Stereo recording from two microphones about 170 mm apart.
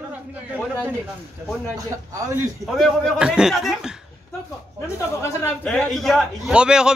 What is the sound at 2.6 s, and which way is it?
A man's voice, 5° left (ahead or behind).